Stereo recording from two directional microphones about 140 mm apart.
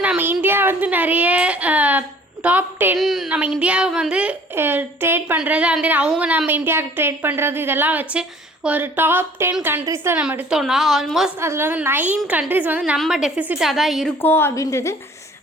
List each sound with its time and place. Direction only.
0.0 s a sound: 10° right (ahead or behind)
3.0 s a woman's voice: centre (ahead or behind); by 10.2 s 15° right (ahead or behind)
10.2 s a woman's voice: 5° right (ahead or behind)
11.3 s a woman's voice: 20° right (ahead or behind); by 14.1 s centre (ahead or behind)
14.2 s a woman's voice: 15° left (ahead or behind)